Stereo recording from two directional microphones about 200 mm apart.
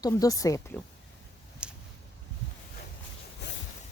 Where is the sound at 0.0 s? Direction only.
20° left (ahead or behind).